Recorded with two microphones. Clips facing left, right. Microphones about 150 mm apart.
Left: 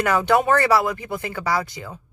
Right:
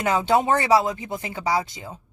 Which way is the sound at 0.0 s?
20° right (ahead or behind).